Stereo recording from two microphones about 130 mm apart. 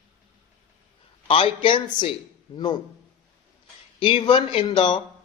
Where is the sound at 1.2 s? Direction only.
45° left (ahead or behind).